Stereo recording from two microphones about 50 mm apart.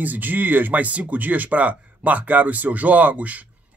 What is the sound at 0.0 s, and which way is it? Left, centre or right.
Speech, right.